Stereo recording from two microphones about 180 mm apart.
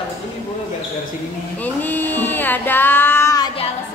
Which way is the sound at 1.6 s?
10° left (ahead or behind).